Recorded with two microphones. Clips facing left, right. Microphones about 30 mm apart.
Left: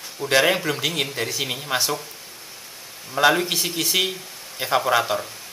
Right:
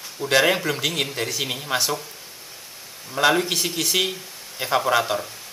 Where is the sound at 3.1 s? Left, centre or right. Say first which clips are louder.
Left 1 dB; centre.